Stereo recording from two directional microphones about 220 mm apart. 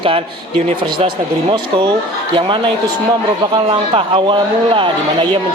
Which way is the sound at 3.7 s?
25° right (ahead or behind).